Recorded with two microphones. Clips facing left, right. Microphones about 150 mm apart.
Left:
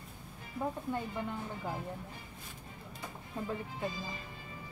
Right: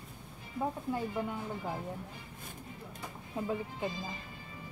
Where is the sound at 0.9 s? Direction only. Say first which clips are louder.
Right 2 dB; 5° right (ahead or behind).